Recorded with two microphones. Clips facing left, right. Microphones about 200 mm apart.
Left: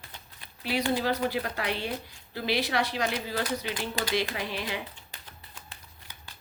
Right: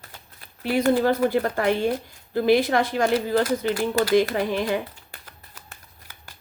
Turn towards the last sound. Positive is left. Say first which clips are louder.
# right 10 dB
turn(degrees=-50)  # may be behind; listen again after turning